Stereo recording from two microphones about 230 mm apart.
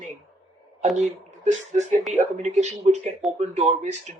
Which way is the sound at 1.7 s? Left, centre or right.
Right.